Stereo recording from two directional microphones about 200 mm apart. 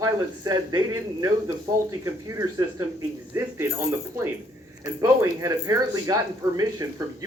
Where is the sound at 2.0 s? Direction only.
15° right (ahead or behind).